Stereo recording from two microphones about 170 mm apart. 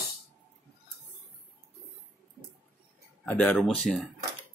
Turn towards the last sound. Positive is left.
turn(degrees=0)  # may be behind; listen again after turning